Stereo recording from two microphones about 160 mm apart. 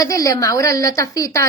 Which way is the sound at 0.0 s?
20° left (ahead or behind).